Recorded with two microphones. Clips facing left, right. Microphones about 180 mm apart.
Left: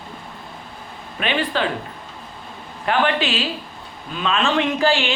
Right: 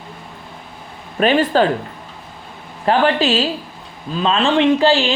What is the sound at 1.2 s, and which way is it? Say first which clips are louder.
Speech: right 8 dB; 40° right (ahead or behind).